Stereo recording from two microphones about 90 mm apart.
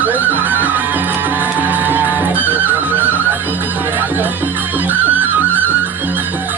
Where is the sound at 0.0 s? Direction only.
20° right (ahead or behind).